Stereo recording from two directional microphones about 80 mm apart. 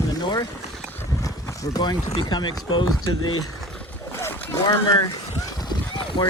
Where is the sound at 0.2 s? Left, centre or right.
Left.